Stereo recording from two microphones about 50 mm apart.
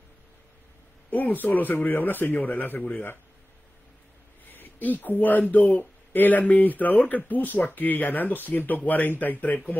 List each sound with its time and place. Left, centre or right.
1.1 s speech: left
4.5 s speech: left